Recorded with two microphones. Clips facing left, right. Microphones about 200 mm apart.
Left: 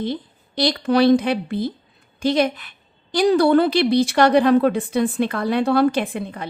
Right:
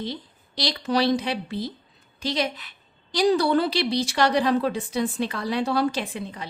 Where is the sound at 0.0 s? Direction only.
50° left (ahead or behind).